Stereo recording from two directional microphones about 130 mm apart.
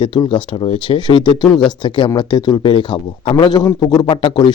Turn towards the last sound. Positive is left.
turn(degrees=35)  # may be behind; listen again after turning